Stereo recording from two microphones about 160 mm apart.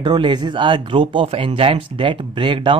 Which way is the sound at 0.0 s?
30° right (ahead or behind).